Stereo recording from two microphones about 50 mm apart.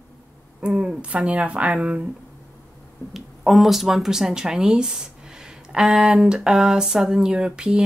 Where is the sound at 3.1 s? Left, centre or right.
Centre.